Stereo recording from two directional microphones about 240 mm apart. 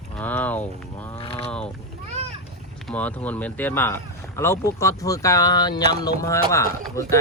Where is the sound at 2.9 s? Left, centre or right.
Centre.